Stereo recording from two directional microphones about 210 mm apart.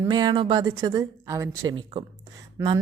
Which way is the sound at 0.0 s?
20° right (ahead or behind).